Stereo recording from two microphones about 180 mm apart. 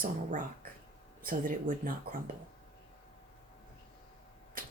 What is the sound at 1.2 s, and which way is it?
Speech, 50° right (ahead or behind).